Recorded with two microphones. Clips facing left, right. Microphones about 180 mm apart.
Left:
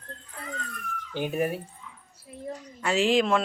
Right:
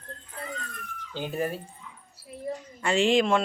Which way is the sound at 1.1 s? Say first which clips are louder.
Left 3 dB; 10° left (ahead or behind).